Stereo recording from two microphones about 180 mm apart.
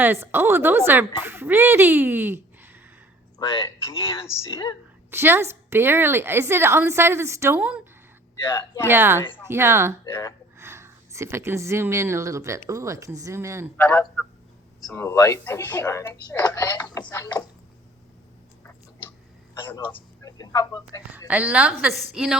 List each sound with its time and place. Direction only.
0.0 s a woman's voice: 10° right (ahead or behind)
3.4 s speech: 30° left (ahead or behind)
5.1 s a woman's voice: 15° right (ahead or behind)
8.4 s speech: 15° left (ahead or behind)
8.9 s a woman's voice: 10° right (ahead or behind)
10.0 s speech: 20° left (ahead or behind)
10.6 s speech: 15° right (ahead or behind)
13.7 s speech: 10° left (ahead or behind)
19.6 s speech: 15° left (ahead or behind)
21.2 s a woman's voice: 10° right (ahead or behind)